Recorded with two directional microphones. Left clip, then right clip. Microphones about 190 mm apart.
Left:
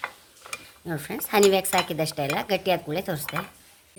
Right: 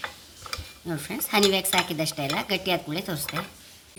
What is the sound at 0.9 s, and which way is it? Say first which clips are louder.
Cutlery: even; 40° left (ahead or behind).